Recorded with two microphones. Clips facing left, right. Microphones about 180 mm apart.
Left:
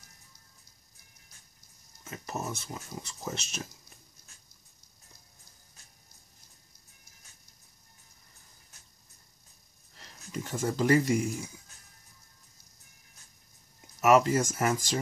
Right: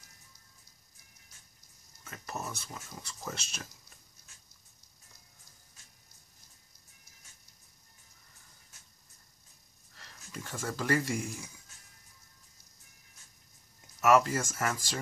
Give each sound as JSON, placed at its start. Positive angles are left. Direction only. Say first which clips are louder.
{"t": 2.0, "sound": "speech", "louder": "left 4 dB", "side_deg": 20}
{"t": 9.9, "sound": "speech", "louder": "left 7 dB", "side_deg": 15}
{"t": 13.7, "sound": "speech", "louder": "left 2 dB", "side_deg": 20}